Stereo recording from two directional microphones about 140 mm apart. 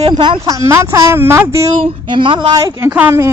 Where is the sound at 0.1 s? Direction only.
30° right (ahead or behind).